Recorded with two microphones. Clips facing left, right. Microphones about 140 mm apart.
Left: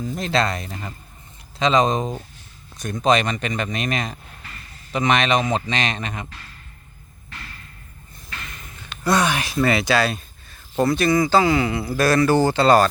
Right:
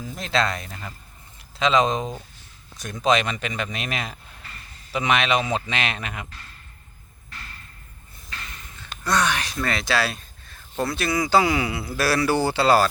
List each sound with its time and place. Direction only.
0.0 s speech: centre (ahead or behind)
0.7 s speech: 20° left (ahead or behind)
1.5 s speech: centre (ahead or behind)
9.0 s speech: 10° left (ahead or behind); by 12.9 s 5° right (ahead or behind)